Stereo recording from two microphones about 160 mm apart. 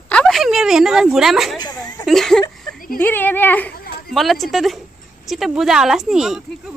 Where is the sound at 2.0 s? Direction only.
Centre (ahead or behind).